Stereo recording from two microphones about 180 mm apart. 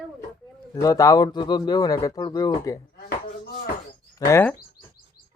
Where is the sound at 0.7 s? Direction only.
20° left (ahead or behind).